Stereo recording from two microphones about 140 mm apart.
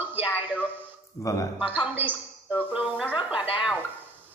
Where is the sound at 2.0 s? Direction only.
15° right (ahead or behind).